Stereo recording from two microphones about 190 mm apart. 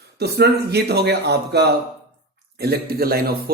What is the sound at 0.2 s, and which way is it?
Speech, 60° right (ahead or behind).